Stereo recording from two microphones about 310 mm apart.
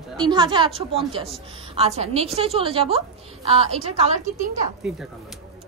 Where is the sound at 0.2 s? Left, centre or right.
Centre.